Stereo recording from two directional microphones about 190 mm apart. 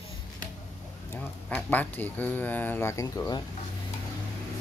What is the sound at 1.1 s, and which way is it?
Speech, 10° left (ahead or behind).